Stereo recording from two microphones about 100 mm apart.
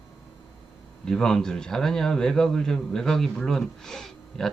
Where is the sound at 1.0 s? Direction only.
5° left (ahead or behind).